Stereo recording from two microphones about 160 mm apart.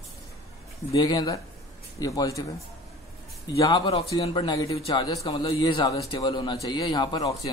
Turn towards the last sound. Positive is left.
turn(degrees=25)  # may be behind; listen again after turning